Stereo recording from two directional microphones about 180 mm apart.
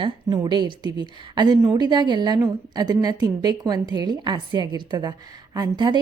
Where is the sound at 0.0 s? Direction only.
25° right (ahead or behind).